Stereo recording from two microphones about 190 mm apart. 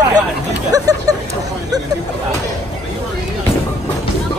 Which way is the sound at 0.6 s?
20° right (ahead or behind).